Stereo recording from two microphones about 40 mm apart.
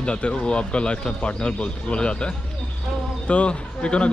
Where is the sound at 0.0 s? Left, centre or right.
Left.